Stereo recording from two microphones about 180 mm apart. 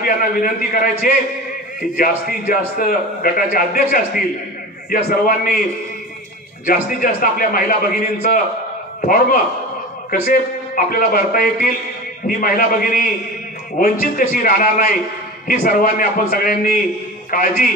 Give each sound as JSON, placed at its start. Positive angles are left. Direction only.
{"t": 0.0, "sound": "a man's voice", "side_deg": 50}
{"t": 4.8, "sound": "a man's voice", "side_deg": 50}
{"t": 6.6, "sound": "a man's voice", "side_deg": 50}